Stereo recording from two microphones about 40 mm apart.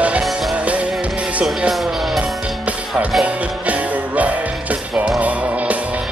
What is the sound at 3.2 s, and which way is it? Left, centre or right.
Music, right.